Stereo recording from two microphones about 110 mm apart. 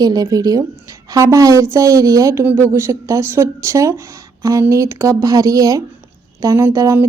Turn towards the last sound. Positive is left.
turn(degrees=-30)  # may be behind; listen again after turning